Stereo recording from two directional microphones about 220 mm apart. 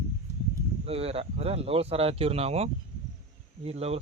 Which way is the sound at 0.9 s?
25° right (ahead or behind).